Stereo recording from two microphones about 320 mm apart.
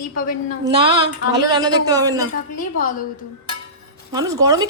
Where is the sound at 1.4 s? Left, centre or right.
Centre.